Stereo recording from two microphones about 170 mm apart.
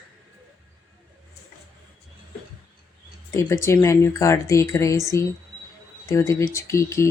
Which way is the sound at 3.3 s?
20° left (ahead or behind).